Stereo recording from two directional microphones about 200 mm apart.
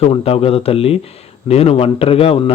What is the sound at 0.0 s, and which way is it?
A man's voice, 30° left (ahead or behind).